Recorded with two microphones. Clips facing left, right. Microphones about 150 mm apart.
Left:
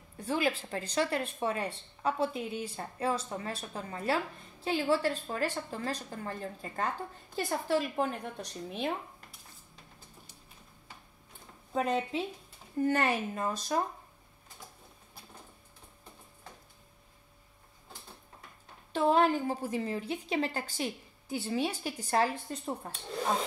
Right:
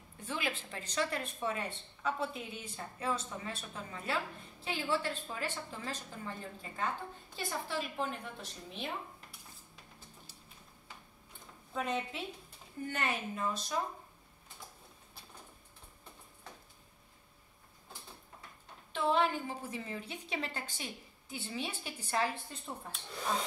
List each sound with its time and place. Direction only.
0.2 s a woman's voice: 35° left (ahead or behind)
7.6 s a woman's voice: 45° left (ahead or behind)
11.7 s a woman's voice: 35° left (ahead or behind)
18.9 s a woman's voice: 40° left (ahead or behind)